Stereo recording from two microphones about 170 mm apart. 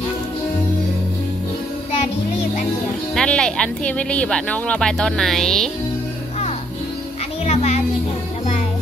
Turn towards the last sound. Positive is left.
turn(degrees=40)  # may be behind; listen again after turning